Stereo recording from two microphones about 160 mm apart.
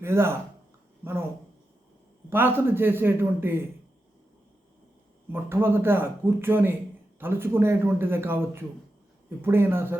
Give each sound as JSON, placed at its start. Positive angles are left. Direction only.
{"t": 0.0, "sound": "speech", "side_deg": -15}
{"t": 2.3, "sound": "speech", "side_deg": -15}
{"t": 5.3, "sound": "speech", "side_deg": -15}